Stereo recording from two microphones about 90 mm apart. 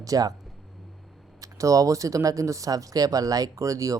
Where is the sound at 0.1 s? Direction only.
45° right (ahead or behind).